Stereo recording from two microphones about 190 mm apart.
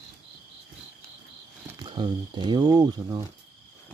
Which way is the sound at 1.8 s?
25° right (ahead or behind).